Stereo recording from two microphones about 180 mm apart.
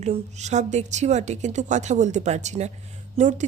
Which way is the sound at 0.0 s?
40° right (ahead or behind).